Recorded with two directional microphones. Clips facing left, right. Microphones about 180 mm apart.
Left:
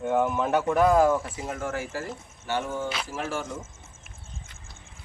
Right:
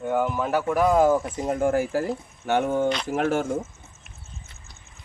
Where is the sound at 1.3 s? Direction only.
40° right (ahead or behind).